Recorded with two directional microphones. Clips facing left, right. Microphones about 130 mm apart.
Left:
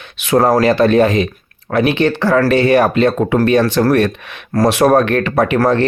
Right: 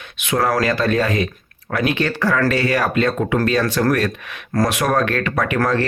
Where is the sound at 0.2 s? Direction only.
35° left (ahead or behind).